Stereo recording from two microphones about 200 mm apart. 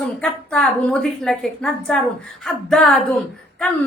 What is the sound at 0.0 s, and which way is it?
A woman's voice, 5° left (ahead or behind).